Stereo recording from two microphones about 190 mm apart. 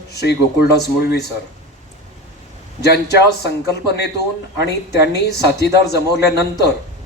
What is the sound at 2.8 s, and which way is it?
Speech, 60° left (ahead or behind).